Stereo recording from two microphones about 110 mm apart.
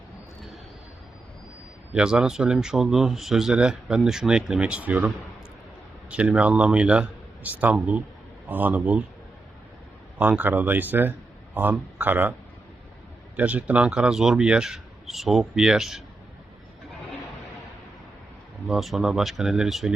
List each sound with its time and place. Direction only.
1.9 s a man's voice: 5° right (ahead or behind)
10.2 s a man's voice: 15° right (ahead or behind)
13.3 s speech: 15° right (ahead or behind)
18.7 s speech: centre (ahead or behind)